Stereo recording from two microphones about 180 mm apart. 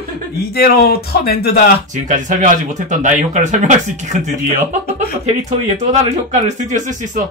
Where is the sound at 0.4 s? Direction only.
60° left (ahead or behind).